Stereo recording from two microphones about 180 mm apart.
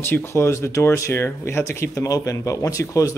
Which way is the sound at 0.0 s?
10° left (ahead or behind).